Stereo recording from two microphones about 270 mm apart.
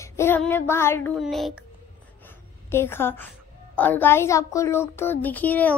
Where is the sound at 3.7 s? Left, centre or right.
Centre.